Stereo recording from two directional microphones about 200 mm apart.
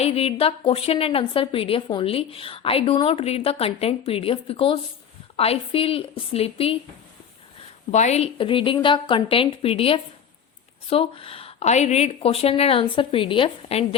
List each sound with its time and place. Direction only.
0.0 s a woman's voice: 30° left (ahead or behind)
7.9 s a woman's voice: 35° left (ahead or behind)